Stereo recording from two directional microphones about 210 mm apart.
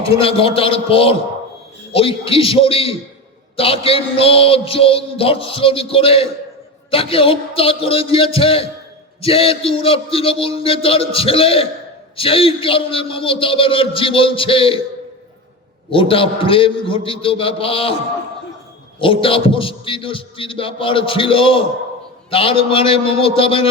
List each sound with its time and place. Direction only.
0.1 s a man's voice: 25° left (ahead or behind)
15.9 s a man's voice: 25° left (ahead or behind)
18.9 s a man's voice: 25° left (ahead or behind)